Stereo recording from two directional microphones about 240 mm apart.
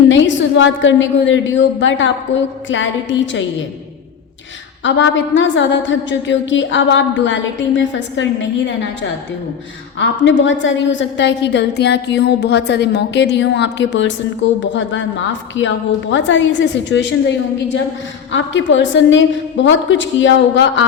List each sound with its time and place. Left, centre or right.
0.1 s a woman's voice: left
4.8 s a woman's voice: left